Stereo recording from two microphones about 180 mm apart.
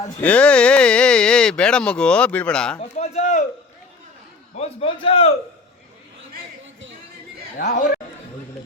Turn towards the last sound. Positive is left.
turn(degrees=60)  # may be behind; listen again after turning